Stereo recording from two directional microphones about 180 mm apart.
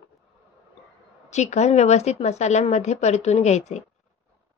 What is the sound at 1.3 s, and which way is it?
Speech, 40° left (ahead or behind).